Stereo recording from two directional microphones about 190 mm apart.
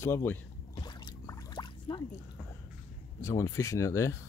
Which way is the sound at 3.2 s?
15° left (ahead or behind).